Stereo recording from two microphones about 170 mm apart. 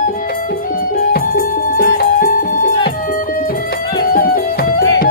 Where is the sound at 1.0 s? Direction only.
60° left (ahead or behind).